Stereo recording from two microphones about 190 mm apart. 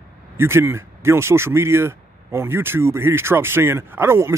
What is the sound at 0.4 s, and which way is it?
Speech, 10° right (ahead or behind).